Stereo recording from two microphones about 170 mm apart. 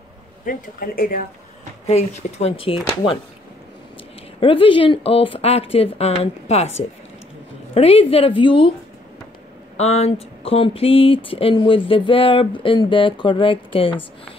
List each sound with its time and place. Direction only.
0.5 s speech: 55° left (ahead or behind)
1.9 s speech: 40° left (ahead or behind)
4.4 s speech: 30° left (ahead or behind)
7.7 s speech: 35° left (ahead or behind)
9.8 s speech: 40° left (ahead or behind)